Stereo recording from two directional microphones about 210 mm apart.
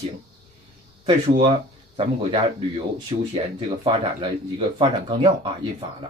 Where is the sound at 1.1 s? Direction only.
25° right (ahead or behind).